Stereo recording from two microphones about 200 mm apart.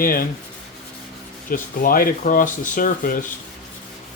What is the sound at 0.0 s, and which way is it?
Speech, 45° left (ahead or behind).